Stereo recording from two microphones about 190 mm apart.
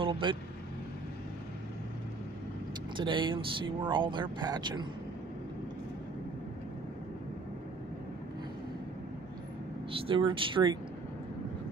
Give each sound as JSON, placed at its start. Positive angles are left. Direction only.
{"t": 0.0, "sound": "speech", "side_deg": -25}
{"t": 3.0, "sound": "speech", "side_deg": -25}
{"t": 9.9, "sound": "speech", "side_deg": -25}